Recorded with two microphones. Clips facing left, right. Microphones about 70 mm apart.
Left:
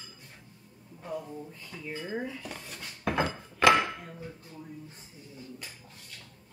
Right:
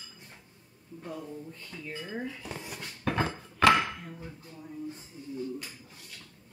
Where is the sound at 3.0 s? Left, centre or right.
Centre.